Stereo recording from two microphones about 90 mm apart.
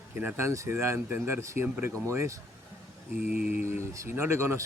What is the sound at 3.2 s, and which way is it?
Mantra, 15° right (ahead or behind).